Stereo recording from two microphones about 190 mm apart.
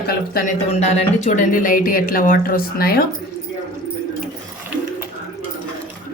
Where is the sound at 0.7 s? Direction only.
35° left (ahead or behind); by 3.0 s 50° left (ahead or behind).